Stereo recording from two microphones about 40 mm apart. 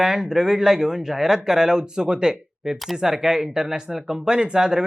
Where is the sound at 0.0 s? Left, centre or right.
Centre.